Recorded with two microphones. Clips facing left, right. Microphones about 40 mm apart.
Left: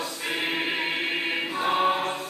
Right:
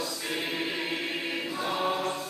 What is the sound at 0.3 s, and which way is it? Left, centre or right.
Choir, left.